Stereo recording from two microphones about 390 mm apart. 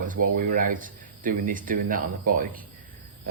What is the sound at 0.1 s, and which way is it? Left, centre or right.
Speech, right.